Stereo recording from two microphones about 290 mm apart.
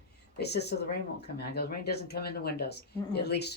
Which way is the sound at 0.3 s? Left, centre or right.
Left.